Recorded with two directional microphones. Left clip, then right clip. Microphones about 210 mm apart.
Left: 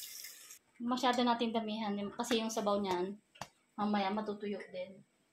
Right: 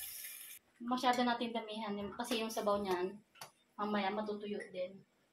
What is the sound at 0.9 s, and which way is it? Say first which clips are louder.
A woman's voice: left 1 dB; 50° left (ahead or behind).